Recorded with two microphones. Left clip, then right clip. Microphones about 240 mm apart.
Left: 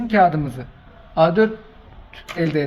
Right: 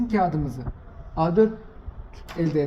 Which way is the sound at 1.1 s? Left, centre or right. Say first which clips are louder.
Left 5 dB; left.